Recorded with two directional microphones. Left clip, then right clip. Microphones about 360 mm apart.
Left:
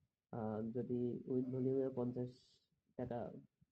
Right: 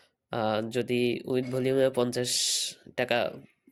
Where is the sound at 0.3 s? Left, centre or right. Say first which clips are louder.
Right 17 dB; right.